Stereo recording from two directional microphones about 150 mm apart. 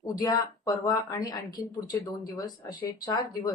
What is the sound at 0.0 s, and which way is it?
A woman's voice, 25° left (ahead or behind).